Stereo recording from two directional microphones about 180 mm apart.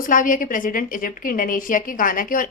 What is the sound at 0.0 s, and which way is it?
A woman's voice, 50° left (ahead or behind).